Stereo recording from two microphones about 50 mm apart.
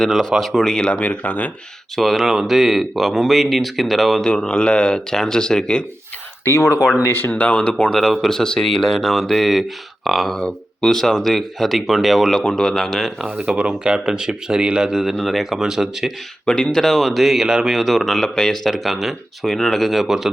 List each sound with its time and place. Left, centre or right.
0.1 s speech: centre
0.6 s speech: centre
0.9 s speech: left
2.0 s speech: centre
4.2 s speech: centre
6.4 s speech: left
7.0 s speech: left
7.3 s speech: left
7.9 s speech: centre
10.3 s speech: centre
13.2 s speech: right
14.9 s speech: centre
16.5 s speech: centre
18.7 s speech: centre